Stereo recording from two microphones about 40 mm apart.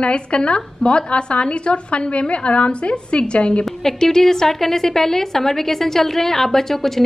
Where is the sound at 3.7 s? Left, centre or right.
Centre.